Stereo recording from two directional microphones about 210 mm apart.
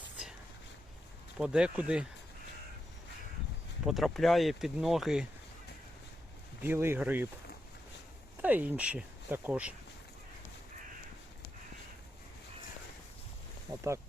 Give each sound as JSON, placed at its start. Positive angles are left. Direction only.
{"t": 1.4, "sound": "speech", "side_deg": -5}
{"t": 3.8, "sound": "speech", "side_deg": 0}
{"t": 6.6, "sound": "speech", "side_deg": -10}
{"t": 8.4, "sound": "speech", "side_deg": -10}
{"t": 13.7, "sound": "boat", "side_deg": -20}